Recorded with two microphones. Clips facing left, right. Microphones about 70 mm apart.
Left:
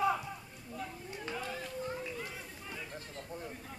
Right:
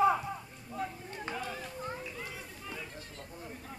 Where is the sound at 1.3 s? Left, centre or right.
Right.